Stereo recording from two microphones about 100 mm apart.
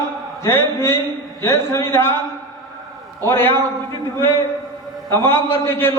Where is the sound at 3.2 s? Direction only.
25° left (ahead or behind).